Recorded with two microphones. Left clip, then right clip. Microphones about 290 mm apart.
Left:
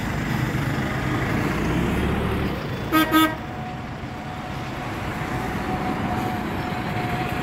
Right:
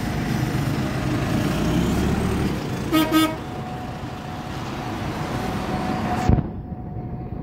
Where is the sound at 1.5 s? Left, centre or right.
Right.